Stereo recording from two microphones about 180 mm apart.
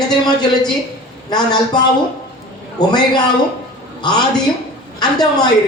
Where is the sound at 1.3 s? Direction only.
25° left (ahead or behind).